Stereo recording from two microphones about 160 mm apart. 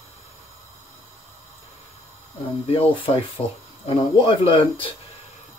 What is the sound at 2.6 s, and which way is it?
Speech, 35° left (ahead or behind).